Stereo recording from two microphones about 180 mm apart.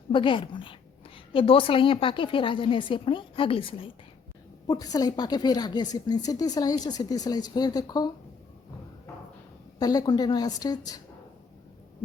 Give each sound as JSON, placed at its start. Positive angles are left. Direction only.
{"t": 0.1, "sound": "a woman's voice", "side_deg": 30}
{"t": 9.8, "sound": "a woman's voice", "side_deg": 20}